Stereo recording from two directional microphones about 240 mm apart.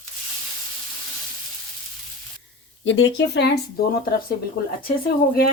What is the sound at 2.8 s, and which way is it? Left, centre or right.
Speech, left.